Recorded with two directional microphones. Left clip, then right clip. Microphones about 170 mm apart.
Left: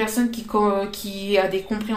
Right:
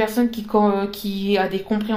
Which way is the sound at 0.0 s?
40° right (ahead or behind).